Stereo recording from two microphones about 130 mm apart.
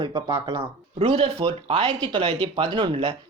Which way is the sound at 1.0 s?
45° right (ahead or behind).